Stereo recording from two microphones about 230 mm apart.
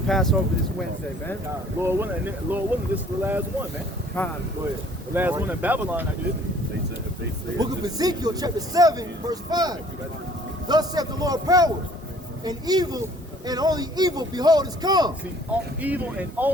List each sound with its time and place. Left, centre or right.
0.1 s speech: centre
1.8 s speech: centre
4.2 s speech: centre
5.1 s speech: centre
7.6 s speech: centre
15.8 s speech: centre